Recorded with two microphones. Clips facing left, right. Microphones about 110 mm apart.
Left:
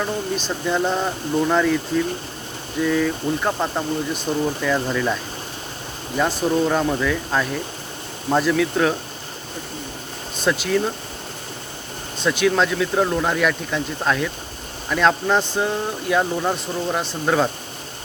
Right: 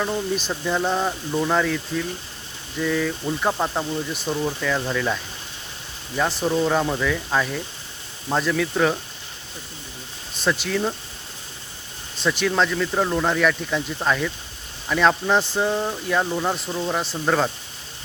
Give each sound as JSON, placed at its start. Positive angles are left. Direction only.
{"t": 0.4, "sound": "speech", "side_deg": 0}
{"t": 2.8, "sound": "speech", "side_deg": 0}
{"t": 4.3, "sound": "speech", "side_deg": 10}
{"t": 6.1, "sound": "speech", "side_deg": 0}
{"t": 10.3, "sound": "speech", "side_deg": 0}
{"t": 12.2, "sound": "speech", "side_deg": 0}